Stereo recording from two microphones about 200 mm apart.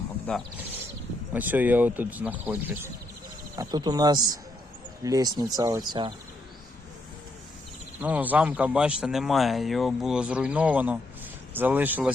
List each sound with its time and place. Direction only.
0.3 s speech: 5° left (ahead or behind)
1.3 s speech: 10° right (ahead or behind)
8.0 s speech: 10° right (ahead or behind)